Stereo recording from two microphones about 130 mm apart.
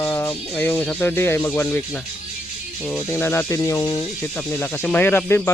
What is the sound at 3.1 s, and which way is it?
Speech, 20° left (ahead or behind).